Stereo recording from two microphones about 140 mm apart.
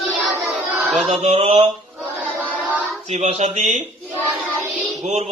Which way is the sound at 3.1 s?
55° right (ahead or behind).